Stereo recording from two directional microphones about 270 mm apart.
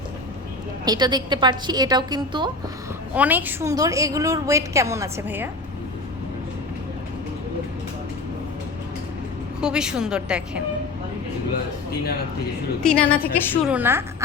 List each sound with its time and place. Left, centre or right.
0.9 s a woman's voice: centre
9.6 s speech: centre
12.8 s speech: centre
13.7 s a woman's voice: centre